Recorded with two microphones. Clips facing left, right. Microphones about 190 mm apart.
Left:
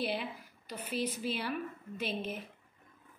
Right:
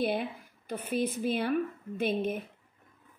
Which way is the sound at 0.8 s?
50° right (ahead or behind).